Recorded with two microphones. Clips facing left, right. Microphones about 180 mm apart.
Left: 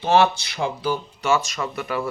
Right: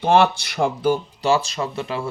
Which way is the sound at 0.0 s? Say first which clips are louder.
Right 1 dB; 55° right (ahead or behind).